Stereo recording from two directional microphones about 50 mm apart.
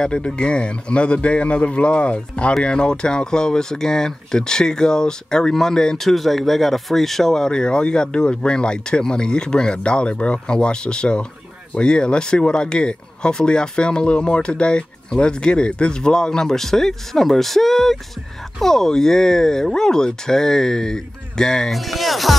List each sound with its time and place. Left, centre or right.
0.0 s speech: centre
21.7 s speech: centre